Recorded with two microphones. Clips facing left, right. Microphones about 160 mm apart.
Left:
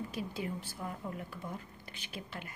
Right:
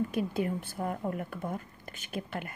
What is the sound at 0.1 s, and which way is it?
A woman's voice, 55° right (ahead or behind).